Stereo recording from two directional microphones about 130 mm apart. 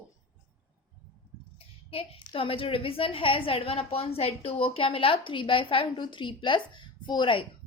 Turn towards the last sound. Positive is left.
turn(degrees=40)  # may be behind; listen again after turning